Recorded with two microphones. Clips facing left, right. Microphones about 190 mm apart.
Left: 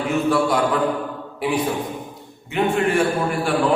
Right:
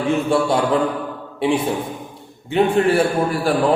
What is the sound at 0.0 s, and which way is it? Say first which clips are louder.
A man's voice: right 1 dB; 30° right (ahead or behind).